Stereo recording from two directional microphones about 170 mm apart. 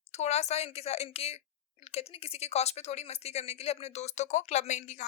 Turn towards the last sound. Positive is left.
turn(degrees=45)  # may be behind; listen again after turning